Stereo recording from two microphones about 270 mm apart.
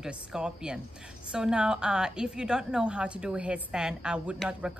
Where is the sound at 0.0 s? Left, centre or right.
Centre.